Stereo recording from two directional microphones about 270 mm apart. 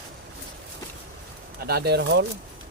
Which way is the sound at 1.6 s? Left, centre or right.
Right.